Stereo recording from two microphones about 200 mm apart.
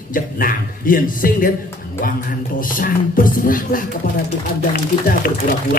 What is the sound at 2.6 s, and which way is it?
A man's voice, 45° left (ahead or behind).